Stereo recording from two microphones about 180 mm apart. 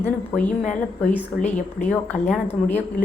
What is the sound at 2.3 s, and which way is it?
Speech, 10° left (ahead or behind).